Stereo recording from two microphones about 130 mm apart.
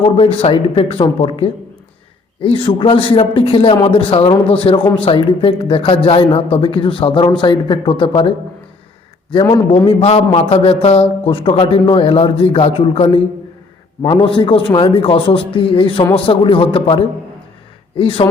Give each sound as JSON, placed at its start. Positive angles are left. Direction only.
{"t": 0.0, "sound": "a man's voice", "side_deg": 45}
{"t": 9.3, "sound": "a man's voice", "side_deg": 40}
{"t": 14.0, "sound": "a man's voice", "side_deg": 35}